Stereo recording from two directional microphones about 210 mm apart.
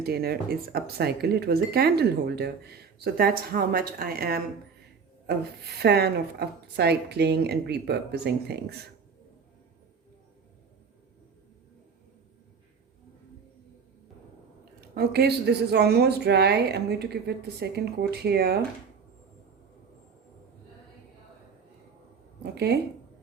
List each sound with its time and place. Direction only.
0.0 s speech: 50° right (ahead or behind)
5.8 s speech: 50° right (ahead or behind)
14.6 s speech: 45° right (ahead or behind)
22.5 s speech: 50° right (ahead or behind)